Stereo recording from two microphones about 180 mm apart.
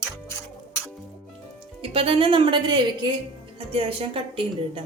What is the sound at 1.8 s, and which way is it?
A woman's voice, 30° right (ahead or behind).